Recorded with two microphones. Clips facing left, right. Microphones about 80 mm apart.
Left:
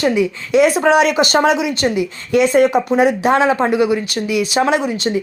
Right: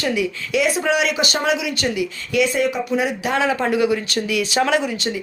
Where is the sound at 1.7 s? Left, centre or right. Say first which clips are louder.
Left 5 dB; left.